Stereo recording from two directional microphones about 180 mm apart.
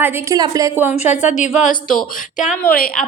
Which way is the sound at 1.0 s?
40° left (ahead or behind).